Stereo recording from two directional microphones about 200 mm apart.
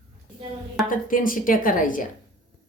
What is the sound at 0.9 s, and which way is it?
A woman's voice, 45° left (ahead or behind).